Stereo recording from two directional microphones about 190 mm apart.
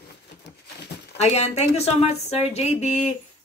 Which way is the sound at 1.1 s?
35° left (ahead or behind).